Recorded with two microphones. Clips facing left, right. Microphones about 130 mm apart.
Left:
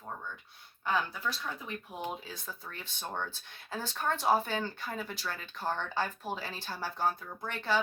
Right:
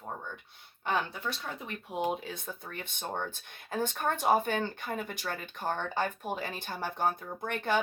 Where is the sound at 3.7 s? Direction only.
55° right (ahead or behind).